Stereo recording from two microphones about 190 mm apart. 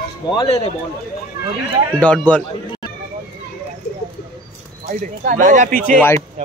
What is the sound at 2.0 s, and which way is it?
Speech, 5° left (ahead or behind).